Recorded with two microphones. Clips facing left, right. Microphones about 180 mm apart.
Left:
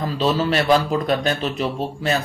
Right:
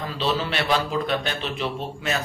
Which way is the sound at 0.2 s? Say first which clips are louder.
Left 5 dB; 40° left (ahead or behind).